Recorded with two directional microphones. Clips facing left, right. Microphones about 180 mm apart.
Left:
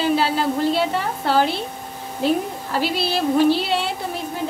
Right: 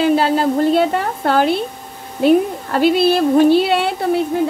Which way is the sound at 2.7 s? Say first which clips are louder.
Right 9 dB; 55° right (ahead or behind).